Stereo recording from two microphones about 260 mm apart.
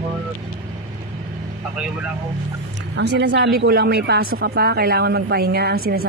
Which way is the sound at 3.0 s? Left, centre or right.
Right.